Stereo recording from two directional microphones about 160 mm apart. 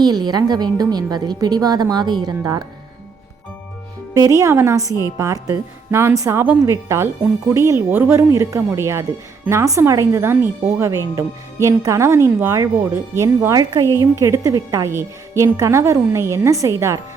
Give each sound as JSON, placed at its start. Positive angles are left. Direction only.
{"t": 0.0, "sound": "a woman's voice", "side_deg": -25}
{"t": 4.1, "sound": "a woman's voice", "side_deg": -20}